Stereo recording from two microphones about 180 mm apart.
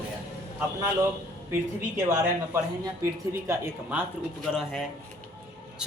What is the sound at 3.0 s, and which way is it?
Speech, 15° right (ahead or behind).